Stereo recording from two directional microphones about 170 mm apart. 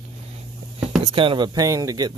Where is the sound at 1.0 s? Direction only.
30° right (ahead or behind).